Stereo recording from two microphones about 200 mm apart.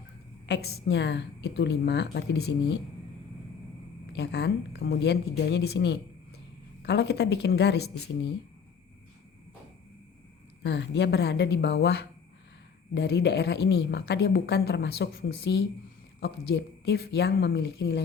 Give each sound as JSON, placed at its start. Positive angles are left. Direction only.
{"t": 0.4, "sound": "a woman's voice", "side_deg": 55}
{"t": 4.1, "sound": "a woman's voice", "side_deg": 60}
{"t": 10.6, "sound": "a woman's voice", "side_deg": 55}